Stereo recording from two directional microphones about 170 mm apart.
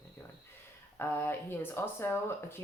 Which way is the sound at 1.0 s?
15° left (ahead or behind).